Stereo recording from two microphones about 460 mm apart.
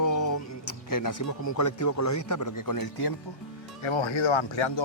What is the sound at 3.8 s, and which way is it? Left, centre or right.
Speech, left.